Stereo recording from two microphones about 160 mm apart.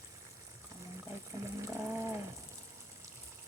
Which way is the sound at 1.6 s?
15° right (ahead or behind).